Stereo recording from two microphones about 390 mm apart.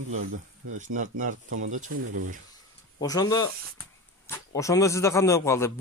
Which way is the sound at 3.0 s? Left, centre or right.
Centre.